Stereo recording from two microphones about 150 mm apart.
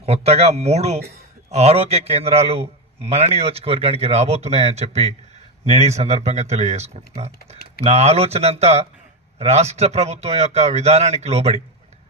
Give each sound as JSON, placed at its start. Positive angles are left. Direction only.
{"t": 0.0, "sound": "a man's voice", "side_deg": -45}